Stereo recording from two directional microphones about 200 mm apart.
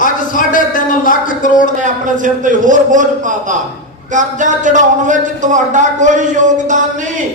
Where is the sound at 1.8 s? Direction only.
40° right (ahead or behind).